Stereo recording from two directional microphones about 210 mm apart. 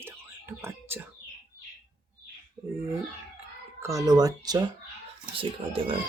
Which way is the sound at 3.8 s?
15° right (ahead or behind).